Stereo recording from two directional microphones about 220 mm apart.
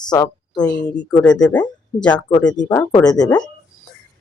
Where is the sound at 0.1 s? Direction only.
20° left (ahead or behind).